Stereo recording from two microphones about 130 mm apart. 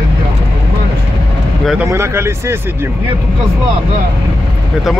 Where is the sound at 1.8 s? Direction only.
20° right (ahead or behind).